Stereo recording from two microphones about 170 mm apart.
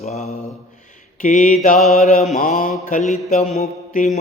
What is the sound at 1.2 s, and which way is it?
Mantra, 50° left (ahead or behind).